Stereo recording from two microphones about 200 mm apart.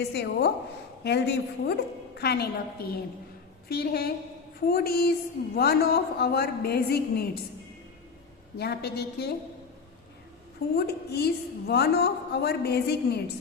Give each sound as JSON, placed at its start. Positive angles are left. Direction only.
{"t": 0.0, "sound": "a woman's voice", "side_deg": 55}
{"t": 8.5, "sound": "a woman's voice", "side_deg": 55}
{"t": 10.8, "sound": "a woman's voice", "side_deg": 55}